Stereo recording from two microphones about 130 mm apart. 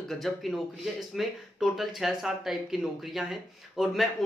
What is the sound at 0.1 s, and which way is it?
Speech, centre (ahead or behind).